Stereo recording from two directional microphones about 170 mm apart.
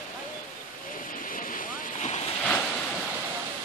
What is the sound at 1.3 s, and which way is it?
Waves, 55° left (ahead or behind).